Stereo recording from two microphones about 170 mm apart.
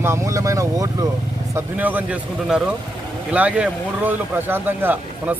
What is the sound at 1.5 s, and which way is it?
A man's voice, 10° right (ahead or behind).